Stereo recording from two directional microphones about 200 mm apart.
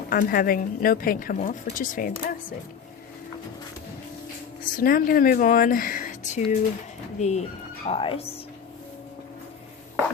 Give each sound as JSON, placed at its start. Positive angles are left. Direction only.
{"t": 0.1, "sound": "a woman's voice", "side_deg": 45}
{"t": 4.8, "sound": "a woman's voice", "side_deg": 45}